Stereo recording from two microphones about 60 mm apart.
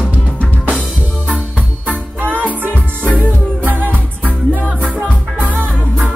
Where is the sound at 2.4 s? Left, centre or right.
Right.